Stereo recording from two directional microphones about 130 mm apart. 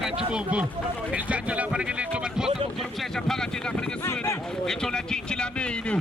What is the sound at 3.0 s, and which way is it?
Speech, 5° left (ahead or behind).